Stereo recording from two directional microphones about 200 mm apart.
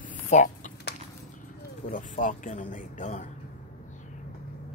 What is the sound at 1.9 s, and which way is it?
Speech, 40° left (ahead or behind).